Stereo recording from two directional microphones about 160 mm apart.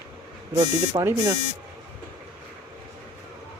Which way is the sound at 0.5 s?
20° right (ahead or behind).